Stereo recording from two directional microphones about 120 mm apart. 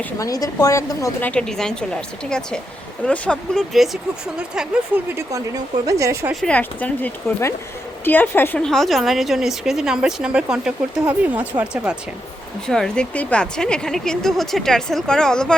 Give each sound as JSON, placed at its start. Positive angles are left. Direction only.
{"t": 0.2, "sound": "a woman's voice", "side_deg": 30}
{"t": 1.2, "sound": "a woman's voice", "side_deg": 10}
{"t": 5.1, "sound": "speech", "side_deg": -30}
{"t": 6.4, "sound": "a woman's voice", "side_deg": 10}
{"t": 12.6, "sound": "a woman's voice", "side_deg": 5}